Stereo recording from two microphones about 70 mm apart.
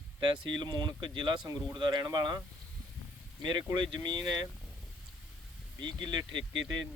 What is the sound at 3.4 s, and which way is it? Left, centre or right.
Speech, right.